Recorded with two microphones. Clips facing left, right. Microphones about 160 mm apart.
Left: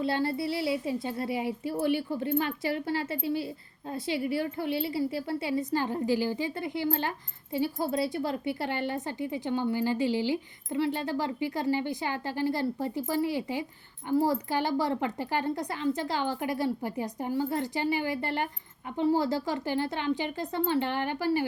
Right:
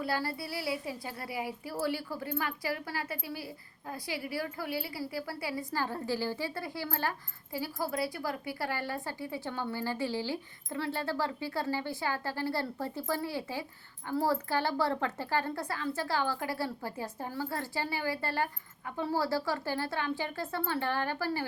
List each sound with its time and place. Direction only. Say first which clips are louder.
0.0 s a woman's voice: left 6 dB; 25° left (ahead or behind)